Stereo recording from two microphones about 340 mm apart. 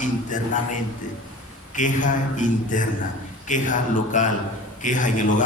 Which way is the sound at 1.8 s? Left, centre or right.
Left.